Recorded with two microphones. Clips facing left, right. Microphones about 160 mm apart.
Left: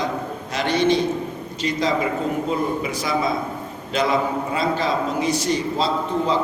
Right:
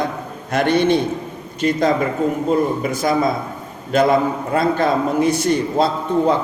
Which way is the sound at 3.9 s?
50° right (ahead or behind).